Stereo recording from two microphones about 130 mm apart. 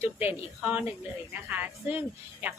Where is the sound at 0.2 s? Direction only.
15° right (ahead or behind).